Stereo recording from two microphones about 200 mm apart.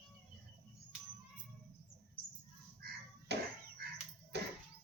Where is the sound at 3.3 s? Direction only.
55° right (ahead or behind).